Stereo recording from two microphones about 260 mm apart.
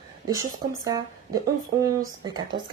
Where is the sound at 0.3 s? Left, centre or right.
Centre.